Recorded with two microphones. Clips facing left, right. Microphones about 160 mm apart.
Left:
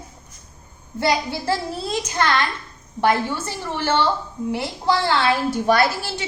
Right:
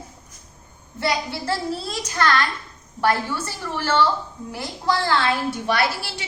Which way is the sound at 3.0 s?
20° left (ahead or behind).